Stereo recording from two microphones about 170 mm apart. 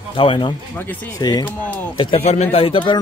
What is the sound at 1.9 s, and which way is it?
Speech, 30° left (ahead or behind).